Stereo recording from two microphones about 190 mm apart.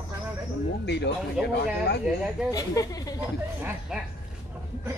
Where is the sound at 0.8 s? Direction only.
60° left (ahead or behind).